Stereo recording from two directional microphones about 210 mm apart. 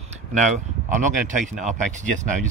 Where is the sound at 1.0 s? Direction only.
35° right (ahead or behind).